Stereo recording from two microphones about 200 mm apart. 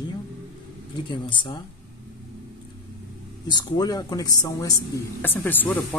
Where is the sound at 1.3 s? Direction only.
25° left (ahead or behind).